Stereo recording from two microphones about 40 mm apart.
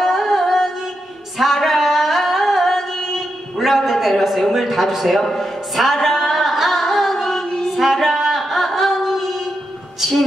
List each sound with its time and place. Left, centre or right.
0.0 s carnatic music: centre
1.4 s singing: centre
3.5 s a sound: centre
5.4 s singing: centre
7.7 s music: centre
8.4 s a sound: centre
9.9 s music: centre